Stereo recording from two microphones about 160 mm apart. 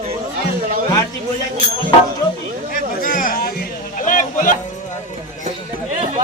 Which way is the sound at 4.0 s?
55° left (ahead or behind).